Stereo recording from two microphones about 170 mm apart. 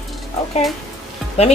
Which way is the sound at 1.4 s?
35° left (ahead or behind).